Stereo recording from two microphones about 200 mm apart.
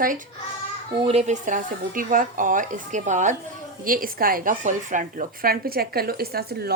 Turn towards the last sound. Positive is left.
turn(degrees=-50)  # may be behind; listen again after turning